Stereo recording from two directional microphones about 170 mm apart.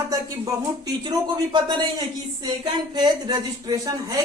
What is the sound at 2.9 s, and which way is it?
Speech, 25° right (ahead or behind).